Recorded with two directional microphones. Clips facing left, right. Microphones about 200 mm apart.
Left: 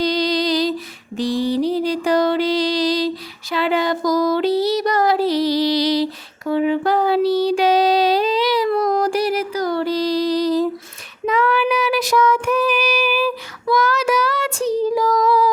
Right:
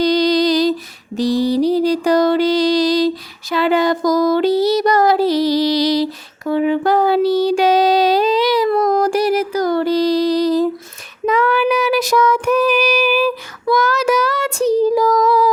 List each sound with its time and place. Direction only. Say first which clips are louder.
0.0 s lullaby: right 5 dB; 45° right (ahead or behind)
1.1 s music: right 4 dB; 40° right (ahead or behind)
3.5 s child singing: right 4 dB; 45° right (ahead or behind)